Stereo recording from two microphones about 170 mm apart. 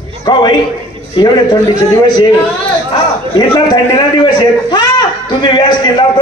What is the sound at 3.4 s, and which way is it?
A man's voice, 25° left (ahead or behind).